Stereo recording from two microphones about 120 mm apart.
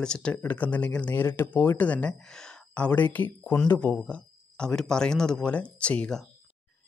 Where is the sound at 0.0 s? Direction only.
5° left (ahead or behind).